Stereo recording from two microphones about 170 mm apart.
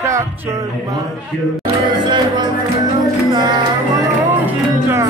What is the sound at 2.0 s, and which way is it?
Music, 25° right (ahead or behind).